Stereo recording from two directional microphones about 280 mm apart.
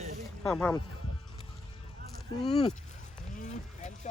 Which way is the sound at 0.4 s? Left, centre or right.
Centre.